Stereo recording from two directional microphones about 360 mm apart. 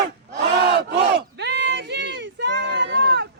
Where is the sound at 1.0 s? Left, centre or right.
Right.